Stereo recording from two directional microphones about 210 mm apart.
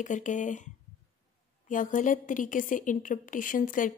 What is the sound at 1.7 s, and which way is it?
A woman's voice, 40° left (ahead or behind).